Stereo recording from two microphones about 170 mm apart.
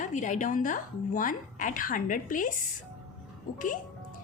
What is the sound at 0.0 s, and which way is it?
A woman's voice, 45° left (ahead or behind).